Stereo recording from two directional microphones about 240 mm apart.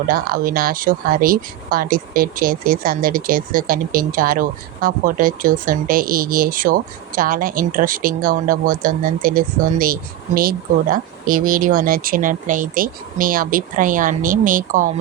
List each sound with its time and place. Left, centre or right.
0.1 s speech: right